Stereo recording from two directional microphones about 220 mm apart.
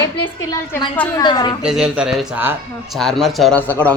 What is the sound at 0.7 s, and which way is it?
Speech, 15° left (ahead or behind).